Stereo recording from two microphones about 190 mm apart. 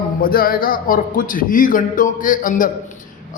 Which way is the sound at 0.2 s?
50° left (ahead or behind).